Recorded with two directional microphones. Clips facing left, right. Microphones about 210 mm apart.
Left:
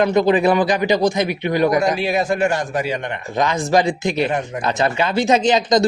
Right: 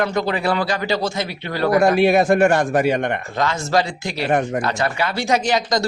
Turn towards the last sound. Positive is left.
turn(degrees=20)  # may be behind; listen again after turning